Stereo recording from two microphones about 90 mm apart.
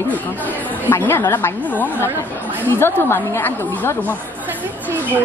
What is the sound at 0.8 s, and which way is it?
A woman's voice, 25° left (ahead or behind).